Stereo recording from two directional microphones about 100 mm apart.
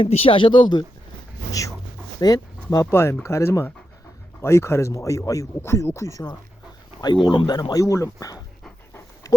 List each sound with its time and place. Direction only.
0.0 s speech: 75° left (ahead or behind); by 0.9 s 50° left (ahead or behind)
1.5 s dog: 35° left (ahead or behind)
2.3 s speech: 40° left (ahead or behind)
2.9 s speech: 25° left (ahead or behind)
7.0 s speech: 50° left (ahead or behind)